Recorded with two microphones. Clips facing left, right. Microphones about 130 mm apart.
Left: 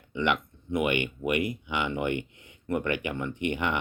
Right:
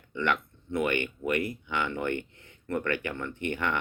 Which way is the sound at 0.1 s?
15° left (ahead or behind).